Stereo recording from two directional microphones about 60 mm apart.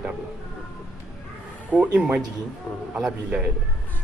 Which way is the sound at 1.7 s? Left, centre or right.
Centre.